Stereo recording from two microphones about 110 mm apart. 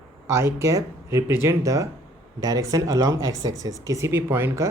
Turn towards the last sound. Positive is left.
turn(degrees=-25)  # may be behind; listen again after turning